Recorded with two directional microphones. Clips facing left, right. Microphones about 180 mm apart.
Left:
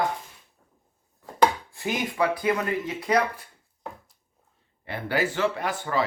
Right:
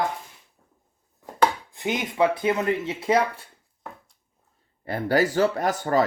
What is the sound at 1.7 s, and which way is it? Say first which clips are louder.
Speech: right 2 dB; 20° right (ahead or behind).